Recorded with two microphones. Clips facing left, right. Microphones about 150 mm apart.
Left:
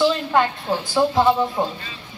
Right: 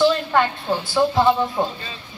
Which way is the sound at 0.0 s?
5° left (ahead or behind).